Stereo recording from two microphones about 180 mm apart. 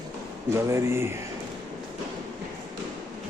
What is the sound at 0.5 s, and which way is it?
Speech, 15° right (ahead or behind).